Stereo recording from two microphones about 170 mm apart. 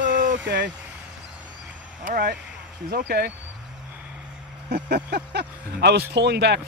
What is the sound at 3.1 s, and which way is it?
Speech, 75° right (ahead or behind).